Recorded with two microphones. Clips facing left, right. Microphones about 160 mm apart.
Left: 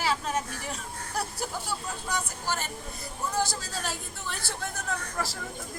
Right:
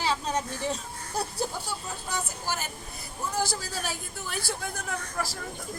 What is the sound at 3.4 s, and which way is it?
Speech, centre (ahead or behind).